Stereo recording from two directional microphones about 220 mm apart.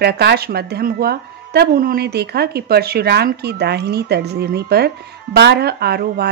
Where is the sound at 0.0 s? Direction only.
50° right (ahead or behind).